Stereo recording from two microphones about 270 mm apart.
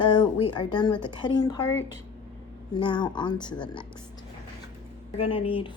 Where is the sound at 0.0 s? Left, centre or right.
Centre.